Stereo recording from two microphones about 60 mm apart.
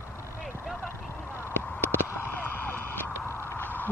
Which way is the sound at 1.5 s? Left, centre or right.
Left.